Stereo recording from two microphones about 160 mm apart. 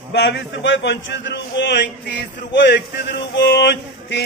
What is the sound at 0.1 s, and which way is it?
A man's voice, 90° left.